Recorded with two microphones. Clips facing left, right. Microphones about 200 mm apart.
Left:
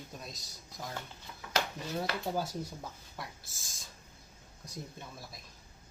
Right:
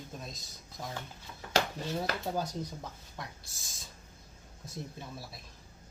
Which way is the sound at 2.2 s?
5° left (ahead or behind).